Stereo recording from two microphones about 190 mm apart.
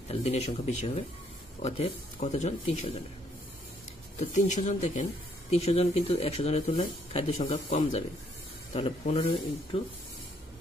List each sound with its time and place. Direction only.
0.1 s speech: 35° left (ahead or behind)
4.2 s speech: 40° left (ahead or behind)
9.0 s speech: 30° left (ahead or behind)